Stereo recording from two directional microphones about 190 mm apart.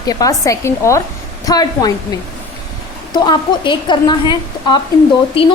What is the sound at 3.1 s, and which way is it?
Speech, 20° left (ahead or behind).